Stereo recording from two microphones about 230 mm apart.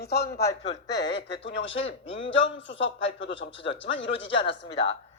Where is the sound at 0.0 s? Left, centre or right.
Left.